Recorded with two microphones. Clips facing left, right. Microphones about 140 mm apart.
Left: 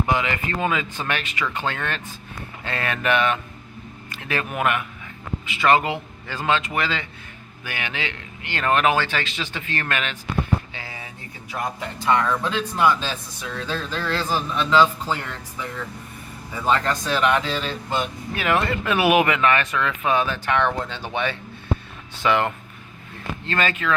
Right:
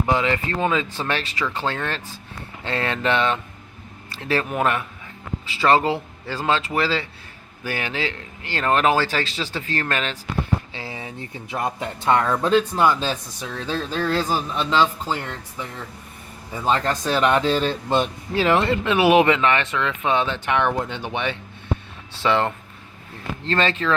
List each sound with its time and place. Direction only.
0.1 s speech: 35° right (ahead or behind)
10.8 s a sound: 25° right (ahead or behind)
11.5 s speech: 30° right (ahead or behind)
16.6 s speech: 35° right (ahead or behind)
17.8 s speech: 25° right (ahead or behind)
22.2 s speech: 30° right (ahead or behind)